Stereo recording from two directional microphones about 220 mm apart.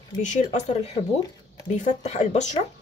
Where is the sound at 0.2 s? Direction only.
35° left (ahead or behind).